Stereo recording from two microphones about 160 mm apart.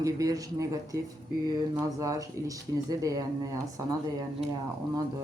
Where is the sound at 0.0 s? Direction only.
20° right (ahead or behind).